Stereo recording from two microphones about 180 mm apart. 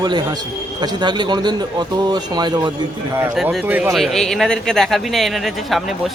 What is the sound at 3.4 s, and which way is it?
Speech, 5° right (ahead or behind).